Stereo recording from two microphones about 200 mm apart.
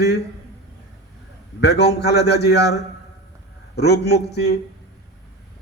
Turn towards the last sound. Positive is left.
turn(degrees=55)  # may be behind; listen again after turning